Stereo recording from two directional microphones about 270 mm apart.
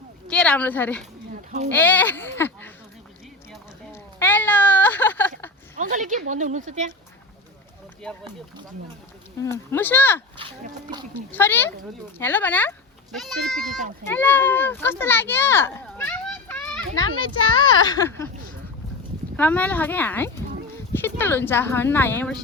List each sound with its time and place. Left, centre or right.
0.3 s a woman's voice: centre
1.3 s a sound: right
1.7 s speech: centre
4.2 s a sound: centre
5.7 s speech: right
9.4 s speech: centre
11.3 s a child's voice: centre
17.8 s speech: centre
19.4 s speech: centre